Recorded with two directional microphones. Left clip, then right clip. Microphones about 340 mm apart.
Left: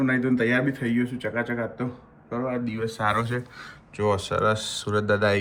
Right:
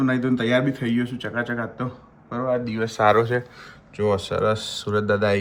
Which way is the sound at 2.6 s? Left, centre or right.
Centre.